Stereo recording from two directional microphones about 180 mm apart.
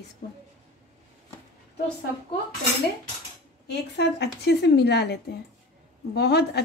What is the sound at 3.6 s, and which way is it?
A woman's voice, 70° left (ahead or behind).